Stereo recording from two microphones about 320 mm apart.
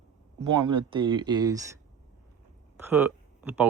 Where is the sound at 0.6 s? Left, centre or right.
Centre.